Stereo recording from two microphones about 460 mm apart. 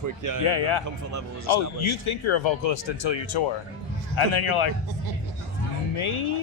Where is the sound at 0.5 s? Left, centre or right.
Left.